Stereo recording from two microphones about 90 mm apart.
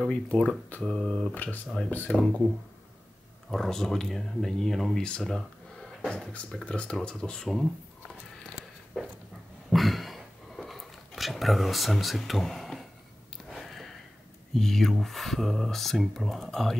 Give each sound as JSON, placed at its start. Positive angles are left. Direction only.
{"t": 0.0, "sound": "speech", "side_deg": 10}
{"t": 1.3, "sound": "speech", "side_deg": 20}
{"t": 3.4, "sound": "speech", "side_deg": 5}
{"t": 9.7, "sound": "a sound", "side_deg": 0}
{"t": 13.5, "sound": "sniff", "side_deg": 0}
{"t": 14.5, "sound": "speech", "side_deg": 5}